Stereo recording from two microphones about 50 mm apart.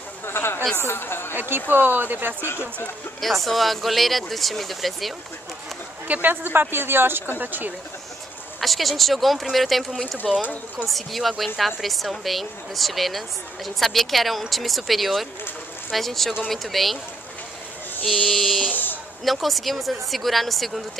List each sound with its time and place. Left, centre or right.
0.2 s a sound: left
0.7 s speech: left
1.3 s speech: right
3.2 s a woman's voice: centre
6.0 s speech: right
7.3 s speech: right
8.5 s a woman's voice: centre
10.4 s speech: left
10.9 s a woman's voice: centre
18.0 s a woman's voice: centre
18.7 s a sound: left
19.2 s a woman's voice: centre